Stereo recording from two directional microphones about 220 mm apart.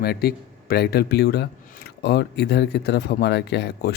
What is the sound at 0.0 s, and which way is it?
Speech, 45° left (ahead or behind).